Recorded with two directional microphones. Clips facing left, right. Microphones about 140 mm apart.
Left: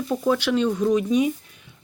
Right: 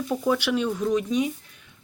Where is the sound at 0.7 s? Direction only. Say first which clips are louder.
Left 4 dB; 5° left (ahead or behind).